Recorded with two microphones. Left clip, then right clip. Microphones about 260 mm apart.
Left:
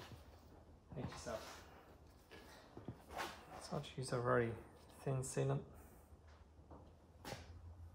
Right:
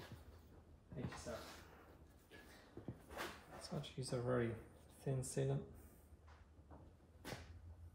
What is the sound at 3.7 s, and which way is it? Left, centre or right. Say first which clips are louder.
Speech: left 3 dB; left.